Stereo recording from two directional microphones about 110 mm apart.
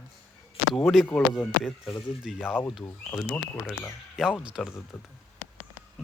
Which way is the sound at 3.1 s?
10° left (ahead or behind).